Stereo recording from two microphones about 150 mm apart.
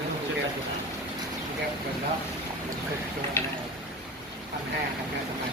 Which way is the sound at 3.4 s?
15° left (ahead or behind).